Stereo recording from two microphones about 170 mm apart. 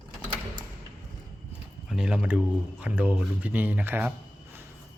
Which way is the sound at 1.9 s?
5° right (ahead or behind).